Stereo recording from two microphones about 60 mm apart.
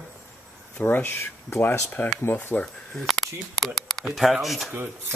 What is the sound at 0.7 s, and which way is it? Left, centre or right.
Speech, left.